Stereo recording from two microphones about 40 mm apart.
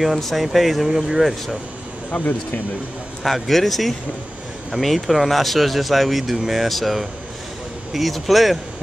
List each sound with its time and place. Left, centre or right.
0.0 s speech: centre
2.0 s speech: left
3.3 s speech: centre